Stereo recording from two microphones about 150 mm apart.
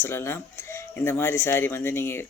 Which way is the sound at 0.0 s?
15° left (ahead or behind).